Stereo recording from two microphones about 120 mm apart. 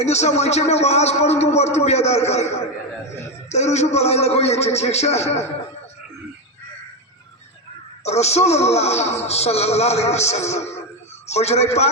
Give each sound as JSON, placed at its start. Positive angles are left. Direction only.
{"t": 0.0, "sound": "a man's voice", "side_deg": 70}
{"t": 8.0, "sound": "a man's voice", "side_deg": 65}